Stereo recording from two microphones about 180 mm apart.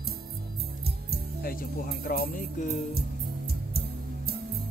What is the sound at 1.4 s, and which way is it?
Speech, 55° left (ahead or behind).